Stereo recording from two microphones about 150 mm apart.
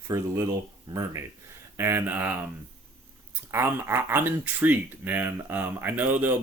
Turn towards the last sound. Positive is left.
turn(degrees=-10)  # may be behind; listen again after turning